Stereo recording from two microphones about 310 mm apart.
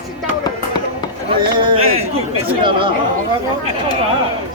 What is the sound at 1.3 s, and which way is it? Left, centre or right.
Speech, centre.